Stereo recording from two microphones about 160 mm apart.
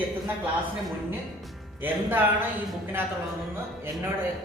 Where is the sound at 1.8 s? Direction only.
10° right (ahead or behind).